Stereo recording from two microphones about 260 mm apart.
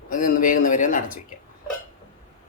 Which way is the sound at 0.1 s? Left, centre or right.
Left.